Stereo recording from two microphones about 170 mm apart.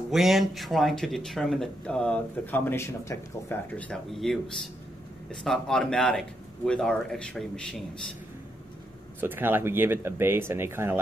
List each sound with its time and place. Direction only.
0.1 s speech: centre (ahead or behind)
9.2 s speech: 10° right (ahead or behind)